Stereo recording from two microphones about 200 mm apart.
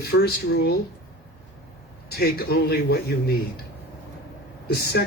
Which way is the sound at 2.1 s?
50° left (ahead or behind).